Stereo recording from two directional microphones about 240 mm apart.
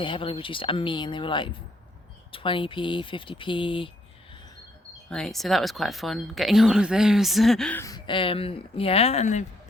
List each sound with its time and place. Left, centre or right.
0.0 s speech: left
5.0 s speech: centre; by 9.4 s left